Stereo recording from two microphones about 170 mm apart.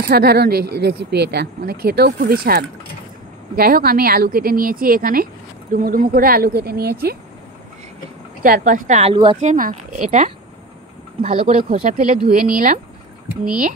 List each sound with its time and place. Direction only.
0.1 s speech: 65° right (ahead or behind)
8.4 s speech: 55° right (ahead or behind)
9.1 s a woman's voice: 30° right (ahead or behind)
9.4 s speech: 50° right (ahead or behind)